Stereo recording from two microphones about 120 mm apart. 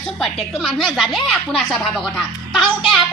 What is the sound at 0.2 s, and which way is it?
A woman's voice, centre (ahead or behind).